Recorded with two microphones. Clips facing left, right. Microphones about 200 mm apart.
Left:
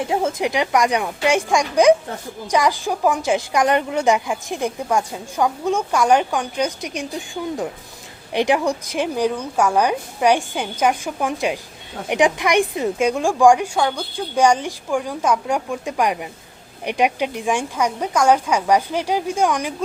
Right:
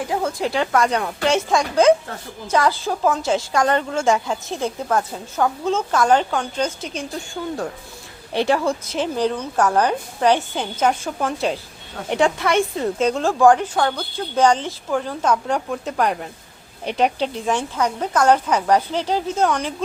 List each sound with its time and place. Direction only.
0.0 s a woman's voice: 20° left (ahead or behind)